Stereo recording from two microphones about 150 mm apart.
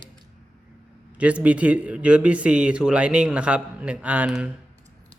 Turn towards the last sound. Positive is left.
turn(degrees=-5)  # may be behind; listen again after turning